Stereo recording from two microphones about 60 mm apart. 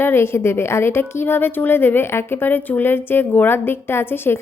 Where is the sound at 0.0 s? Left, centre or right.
Left.